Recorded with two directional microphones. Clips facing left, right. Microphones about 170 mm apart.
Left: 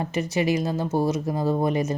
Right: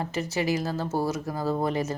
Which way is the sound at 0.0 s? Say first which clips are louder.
Left 4 dB; 15° left (ahead or behind).